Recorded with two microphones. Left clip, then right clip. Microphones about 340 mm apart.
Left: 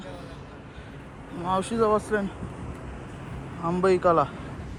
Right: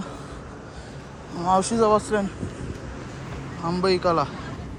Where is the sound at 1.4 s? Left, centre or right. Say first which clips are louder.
Right 4 dB; centre.